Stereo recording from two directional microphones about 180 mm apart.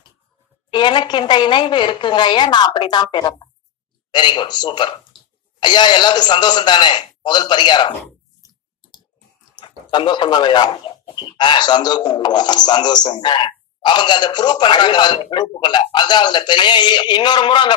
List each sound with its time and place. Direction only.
0.7 s a man's voice: 25° left (ahead or behind)
9.6 s a man's voice: 25° left (ahead or behind)